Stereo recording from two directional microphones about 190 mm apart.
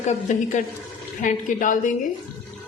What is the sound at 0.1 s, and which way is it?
A woman's voice, 40° left (ahead or behind).